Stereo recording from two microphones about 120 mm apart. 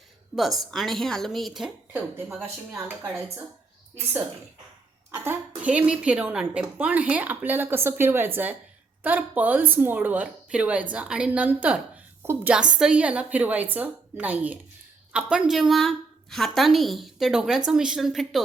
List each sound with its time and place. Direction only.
0.3 s a woman's voice: centre (ahead or behind)
1.9 s speech: 15° right (ahead or behind)
5.1 s a woman's voice: 20° right (ahead or behind)
12.5 s a woman's voice: 10° right (ahead or behind)